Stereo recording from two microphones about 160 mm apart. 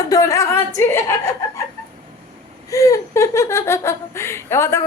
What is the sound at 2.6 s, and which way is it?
Speech, 20° left (ahead or behind).